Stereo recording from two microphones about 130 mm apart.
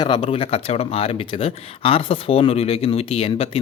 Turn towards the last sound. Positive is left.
turn(degrees=45)  # may be behind; listen again after turning